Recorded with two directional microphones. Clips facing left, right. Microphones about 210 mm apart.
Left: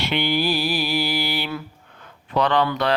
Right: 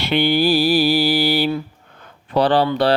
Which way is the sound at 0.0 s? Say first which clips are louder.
Right 5 dB; 35° right (ahead or behind).